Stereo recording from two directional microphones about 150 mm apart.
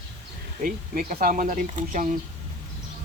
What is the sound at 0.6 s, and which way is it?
Speech, 65° right (ahead or behind).